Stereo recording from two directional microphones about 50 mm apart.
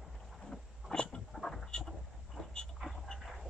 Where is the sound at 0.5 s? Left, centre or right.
Centre.